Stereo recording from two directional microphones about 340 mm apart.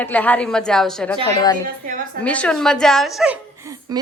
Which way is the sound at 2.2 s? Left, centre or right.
Centre.